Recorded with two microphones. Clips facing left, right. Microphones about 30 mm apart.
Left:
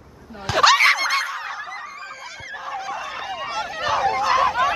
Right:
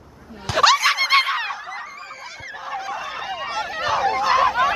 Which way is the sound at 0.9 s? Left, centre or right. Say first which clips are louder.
Left 1 dB; right.